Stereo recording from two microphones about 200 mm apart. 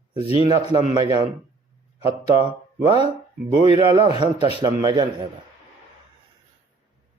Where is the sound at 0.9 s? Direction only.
25° right (ahead or behind).